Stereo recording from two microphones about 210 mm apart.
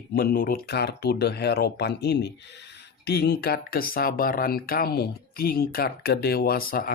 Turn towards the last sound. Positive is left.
turn(degrees=45)  # may be behind; listen again after turning